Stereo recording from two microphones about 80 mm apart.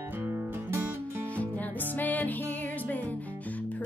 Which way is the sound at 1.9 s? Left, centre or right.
Left.